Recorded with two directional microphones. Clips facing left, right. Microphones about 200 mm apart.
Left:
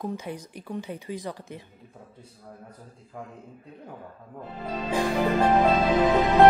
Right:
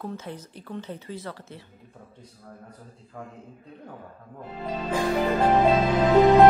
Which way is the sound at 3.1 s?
10° left (ahead or behind).